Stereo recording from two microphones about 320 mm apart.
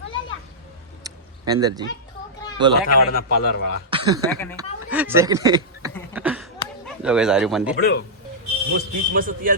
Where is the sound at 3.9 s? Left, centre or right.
Centre.